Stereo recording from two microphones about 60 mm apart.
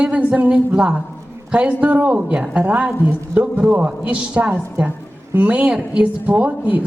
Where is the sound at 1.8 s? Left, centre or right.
Right.